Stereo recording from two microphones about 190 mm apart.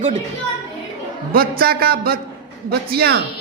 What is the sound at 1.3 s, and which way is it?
A man's voice, 50° right (ahead or behind).